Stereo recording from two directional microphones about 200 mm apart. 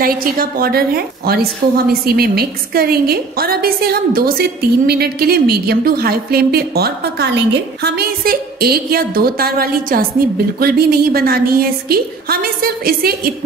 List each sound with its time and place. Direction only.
0.0 s a woman's voice: 45° right (ahead or behind)